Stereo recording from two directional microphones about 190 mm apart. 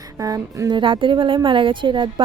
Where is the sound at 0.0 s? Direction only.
20° right (ahead or behind).